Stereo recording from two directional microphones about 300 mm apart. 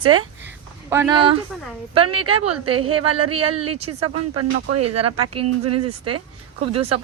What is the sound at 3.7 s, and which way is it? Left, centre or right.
Speech, right.